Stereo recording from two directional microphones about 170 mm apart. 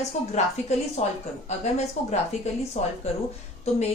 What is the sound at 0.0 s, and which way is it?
A woman's voice, 40° left (ahead or behind).